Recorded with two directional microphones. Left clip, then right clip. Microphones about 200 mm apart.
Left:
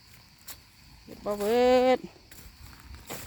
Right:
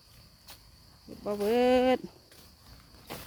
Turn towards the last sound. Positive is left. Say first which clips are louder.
# left 2 dB
turn(degrees=60)  # may be behind; listen again after turning